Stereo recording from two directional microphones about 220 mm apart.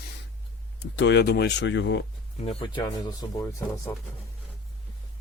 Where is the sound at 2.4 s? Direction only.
25° left (ahead or behind).